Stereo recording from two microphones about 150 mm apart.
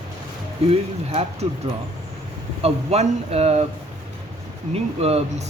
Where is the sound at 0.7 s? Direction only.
40° right (ahead or behind).